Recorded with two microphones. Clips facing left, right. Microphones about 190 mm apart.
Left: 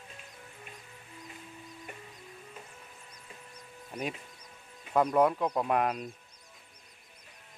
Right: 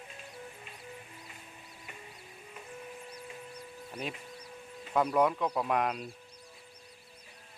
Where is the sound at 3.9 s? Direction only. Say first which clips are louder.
Left 3 dB; 10° left (ahead or behind).